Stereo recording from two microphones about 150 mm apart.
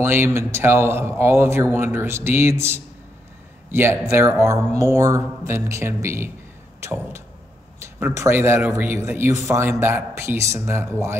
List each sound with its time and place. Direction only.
0.0 s a man's voice: 15° right (ahead or behind)
6.8 s a sound: 15° right (ahead or behind)
7.8 s a man's voice: 15° right (ahead or behind)